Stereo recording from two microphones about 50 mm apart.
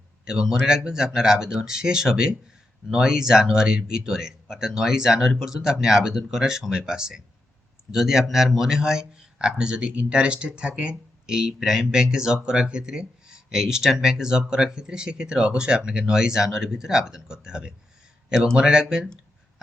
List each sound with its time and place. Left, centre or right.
0.3 s speech: centre